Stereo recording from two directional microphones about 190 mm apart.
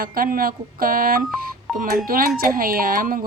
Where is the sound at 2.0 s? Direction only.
50° right (ahead or behind).